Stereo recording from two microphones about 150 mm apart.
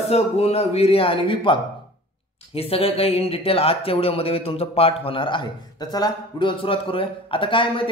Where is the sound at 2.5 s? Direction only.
40° left (ahead or behind).